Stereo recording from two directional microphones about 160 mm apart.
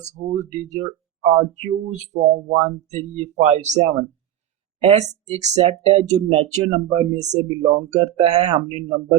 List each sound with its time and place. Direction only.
0.0 s speech: 45° right (ahead or behind)